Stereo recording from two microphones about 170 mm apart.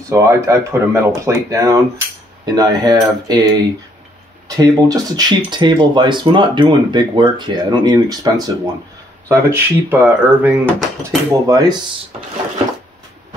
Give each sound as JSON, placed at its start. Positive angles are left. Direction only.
{"t": 0.1, "sound": "speech", "side_deg": -15}
{"t": 4.6, "sound": "speech", "side_deg": -20}
{"t": 10.6, "sound": "speech", "side_deg": 10}
{"t": 11.0, "sound": "speech", "side_deg": -15}